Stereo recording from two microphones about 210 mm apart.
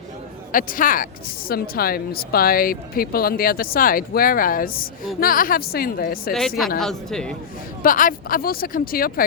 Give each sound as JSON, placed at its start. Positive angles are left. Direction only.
{"t": 0.5, "sound": "speech", "side_deg": 40}
{"t": 6.7, "sound": "a woman's voice", "side_deg": 0}
{"t": 7.8, "sound": "speech", "side_deg": 40}